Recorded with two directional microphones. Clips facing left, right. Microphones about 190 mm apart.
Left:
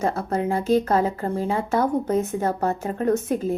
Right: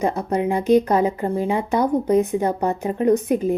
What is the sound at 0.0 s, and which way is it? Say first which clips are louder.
A woman's voice: right 3 dB; 15° right (ahead or behind).